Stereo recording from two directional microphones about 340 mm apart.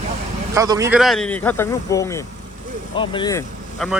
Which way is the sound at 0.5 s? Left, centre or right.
Centre.